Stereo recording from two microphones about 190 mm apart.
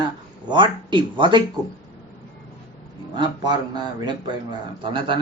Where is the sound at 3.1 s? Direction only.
25° right (ahead or behind).